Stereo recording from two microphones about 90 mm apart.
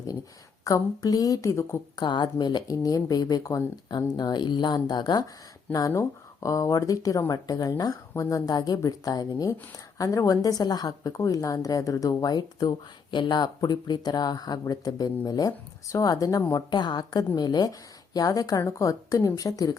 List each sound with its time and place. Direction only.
0.6 s speech: 40° left (ahead or behind)
2.0 s speech: 55° left (ahead or behind)
5.9 s speech: 35° left (ahead or behind)